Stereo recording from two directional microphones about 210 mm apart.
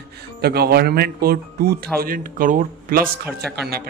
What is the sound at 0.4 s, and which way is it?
Speech, 50° right (ahead or behind).